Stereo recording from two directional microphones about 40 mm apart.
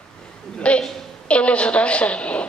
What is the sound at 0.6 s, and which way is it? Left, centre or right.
A woman's voice, left.